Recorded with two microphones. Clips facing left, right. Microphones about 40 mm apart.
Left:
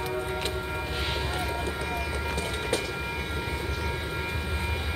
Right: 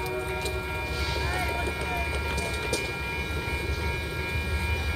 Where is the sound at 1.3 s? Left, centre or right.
Right.